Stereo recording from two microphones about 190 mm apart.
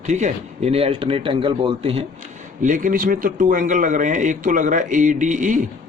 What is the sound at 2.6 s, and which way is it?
Speech, 45° right (ahead or behind).